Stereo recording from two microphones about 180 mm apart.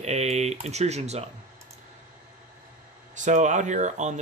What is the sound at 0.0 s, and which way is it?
Speech, 35° right (ahead or behind).